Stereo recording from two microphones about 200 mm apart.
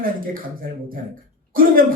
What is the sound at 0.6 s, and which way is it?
Speech, 45° right (ahead or behind).